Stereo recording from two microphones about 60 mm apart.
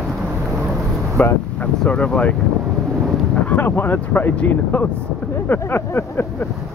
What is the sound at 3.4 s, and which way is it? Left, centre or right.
Speech, left.